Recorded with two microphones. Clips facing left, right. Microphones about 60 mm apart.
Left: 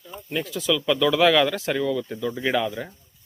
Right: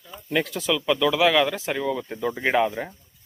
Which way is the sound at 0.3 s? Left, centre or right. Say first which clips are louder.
Right 4 dB; right.